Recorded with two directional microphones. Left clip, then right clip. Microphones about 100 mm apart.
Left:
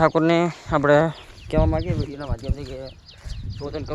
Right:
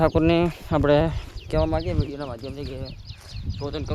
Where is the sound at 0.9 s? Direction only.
30° right (ahead or behind).